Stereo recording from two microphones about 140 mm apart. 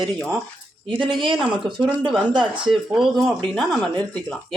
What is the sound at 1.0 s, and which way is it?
Speech, 35° right (ahead or behind).